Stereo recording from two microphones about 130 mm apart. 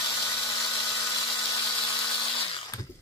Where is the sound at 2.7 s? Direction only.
25° left (ahead or behind).